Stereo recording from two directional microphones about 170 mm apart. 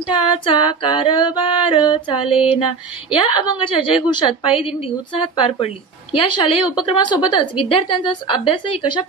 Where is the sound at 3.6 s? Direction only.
30° left (ahead or behind).